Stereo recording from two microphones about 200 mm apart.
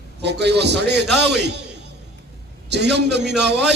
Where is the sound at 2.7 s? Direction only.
60° right (ahead or behind).